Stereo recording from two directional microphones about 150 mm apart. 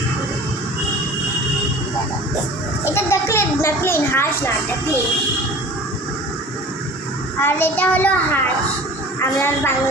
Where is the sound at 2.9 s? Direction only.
15° left (ahead or behind).